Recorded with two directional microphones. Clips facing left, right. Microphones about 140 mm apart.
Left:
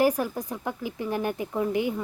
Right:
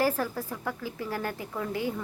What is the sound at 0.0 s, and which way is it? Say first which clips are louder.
A woman's voice: left 4 dB; 15° left (ahead or behind).